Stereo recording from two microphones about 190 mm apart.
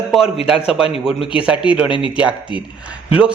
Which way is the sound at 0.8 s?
30° left (ahead or behind).